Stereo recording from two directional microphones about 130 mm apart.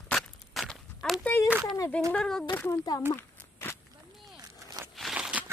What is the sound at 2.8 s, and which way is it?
Speech, 30° left (ahead or behind).